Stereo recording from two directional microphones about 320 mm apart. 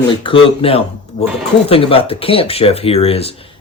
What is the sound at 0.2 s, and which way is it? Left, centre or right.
Speech, centre.